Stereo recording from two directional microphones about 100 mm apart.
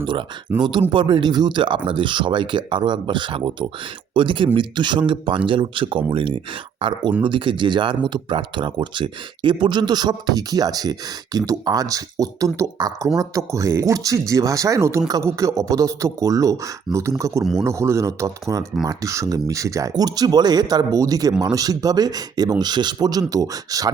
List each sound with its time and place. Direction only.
0.0 s speech: 60° right (ahead or behind); by 23.9 s 35° right (ahead or behind)